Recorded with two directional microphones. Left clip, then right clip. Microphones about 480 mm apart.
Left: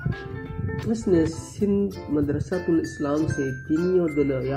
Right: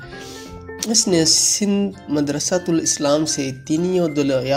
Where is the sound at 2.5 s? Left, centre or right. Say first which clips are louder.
Right 5 dB; right.